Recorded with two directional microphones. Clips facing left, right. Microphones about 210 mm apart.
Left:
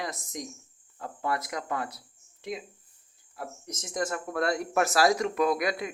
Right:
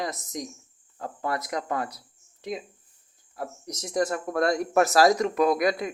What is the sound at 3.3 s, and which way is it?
Speech, 40° right (ahead or behind).